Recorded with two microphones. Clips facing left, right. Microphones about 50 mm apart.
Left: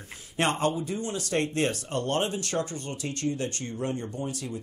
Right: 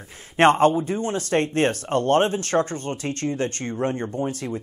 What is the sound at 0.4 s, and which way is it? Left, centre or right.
Speech, right.